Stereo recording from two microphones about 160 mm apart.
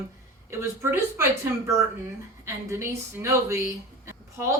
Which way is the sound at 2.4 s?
15° right (ahead or behind).